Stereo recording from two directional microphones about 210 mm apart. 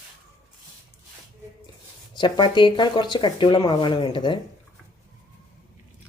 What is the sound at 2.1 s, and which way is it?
Speech, 20° left (ahead or behind).